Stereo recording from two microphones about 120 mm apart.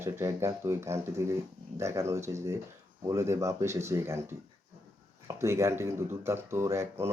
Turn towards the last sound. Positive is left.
turn(degrees=-20)  # may be behind; listen again after turning